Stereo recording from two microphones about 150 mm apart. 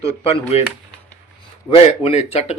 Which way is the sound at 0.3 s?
40° left (ahead or behind).